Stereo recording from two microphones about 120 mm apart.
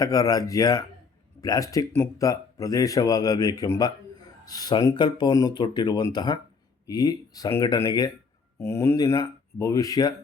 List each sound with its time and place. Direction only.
0.0 s speech: 30° left (ahead or behind)